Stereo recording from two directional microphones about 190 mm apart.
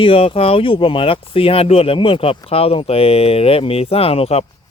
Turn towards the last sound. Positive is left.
turn(degrees=30)  # may be behind; listen again after turning